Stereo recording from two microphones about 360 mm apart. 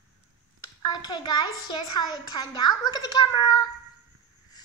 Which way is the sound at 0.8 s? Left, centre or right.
Centre.